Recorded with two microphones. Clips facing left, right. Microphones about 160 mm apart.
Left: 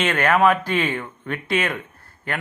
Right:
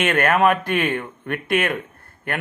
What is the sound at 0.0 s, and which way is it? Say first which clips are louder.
A man's voice: even; 55° right (ahead or behind).